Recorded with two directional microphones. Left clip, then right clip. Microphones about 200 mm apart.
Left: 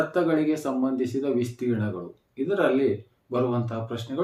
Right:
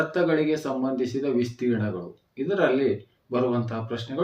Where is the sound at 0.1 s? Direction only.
10° left (ahead or behind).